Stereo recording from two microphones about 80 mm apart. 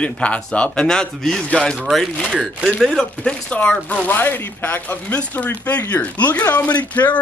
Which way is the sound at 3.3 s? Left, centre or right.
Centre.